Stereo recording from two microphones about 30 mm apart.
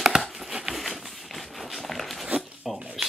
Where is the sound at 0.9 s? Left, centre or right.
Centre.